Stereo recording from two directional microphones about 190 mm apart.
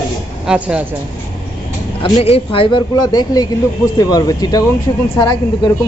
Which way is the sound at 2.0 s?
30° left (ahead or behind).